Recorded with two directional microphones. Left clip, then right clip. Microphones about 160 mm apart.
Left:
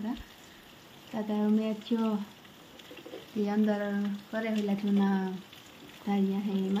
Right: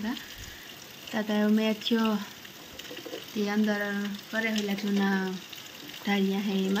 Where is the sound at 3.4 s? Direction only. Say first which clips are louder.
Right 1 dB; 10° left (ahead or behind).